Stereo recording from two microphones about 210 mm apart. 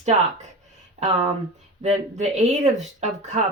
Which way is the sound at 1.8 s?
30° right (ahead or behind).